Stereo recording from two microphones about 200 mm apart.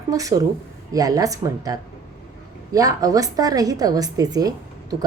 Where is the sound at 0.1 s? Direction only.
15° right (ahead or behind).